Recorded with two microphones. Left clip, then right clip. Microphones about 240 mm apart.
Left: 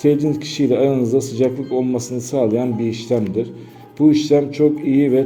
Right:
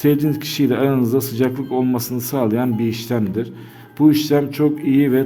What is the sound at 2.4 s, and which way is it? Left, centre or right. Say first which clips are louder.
Speech: left 2 dB; right.